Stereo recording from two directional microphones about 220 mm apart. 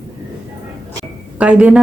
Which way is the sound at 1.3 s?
5° right (ahead or behind).